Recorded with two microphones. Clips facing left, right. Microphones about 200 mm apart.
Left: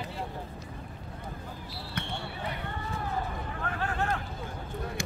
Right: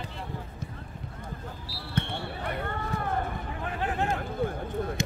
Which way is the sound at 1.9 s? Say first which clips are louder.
Right 5 dB; 55° right (ahead or behind).